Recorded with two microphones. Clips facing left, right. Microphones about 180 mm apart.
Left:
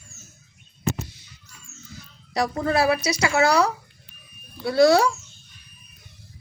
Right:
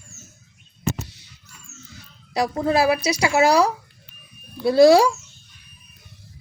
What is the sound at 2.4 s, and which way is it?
Speech, 20° right (ahead or behind).